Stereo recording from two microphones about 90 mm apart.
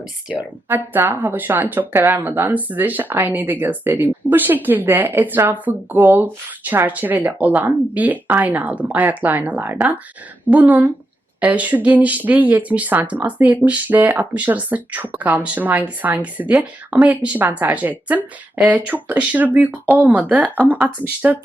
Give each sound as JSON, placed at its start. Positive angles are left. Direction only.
{"t": 0.3, "sound": "speech", "side_deg": -20}